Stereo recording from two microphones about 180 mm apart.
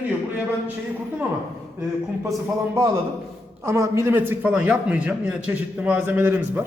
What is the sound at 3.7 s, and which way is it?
A man's voice, 15° right (ahead or behind).